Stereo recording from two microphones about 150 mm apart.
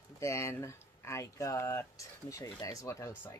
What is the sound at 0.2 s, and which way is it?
Speech, 20° left (ahead or behind).